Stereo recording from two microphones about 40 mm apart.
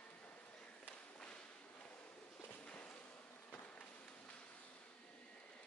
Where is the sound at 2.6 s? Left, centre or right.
Left.